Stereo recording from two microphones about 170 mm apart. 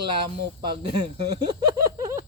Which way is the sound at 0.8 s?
25° right (ahead or behind).